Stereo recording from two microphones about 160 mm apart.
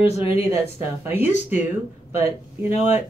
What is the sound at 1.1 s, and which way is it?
Speech, 10° right (ahead or behind).